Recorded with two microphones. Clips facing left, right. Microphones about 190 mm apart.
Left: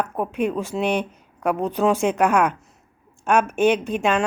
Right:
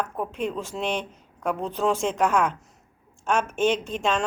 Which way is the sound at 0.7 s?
10° left (ahead or behind).